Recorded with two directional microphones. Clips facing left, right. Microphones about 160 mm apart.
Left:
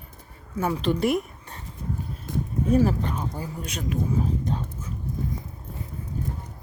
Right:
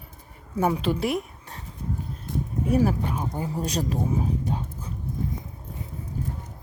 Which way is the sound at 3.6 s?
35° right (ahead or behind).